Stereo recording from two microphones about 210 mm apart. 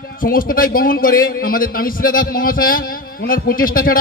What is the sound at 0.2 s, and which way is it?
A man's voice, 40° left (ahead or behind).